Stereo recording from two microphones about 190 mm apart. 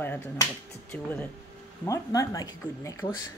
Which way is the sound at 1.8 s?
15° left (ahead or behind).